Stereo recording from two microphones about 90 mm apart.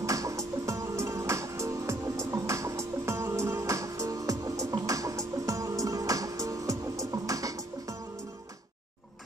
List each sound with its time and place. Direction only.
0.0 s music: 35° right (ahead or behind)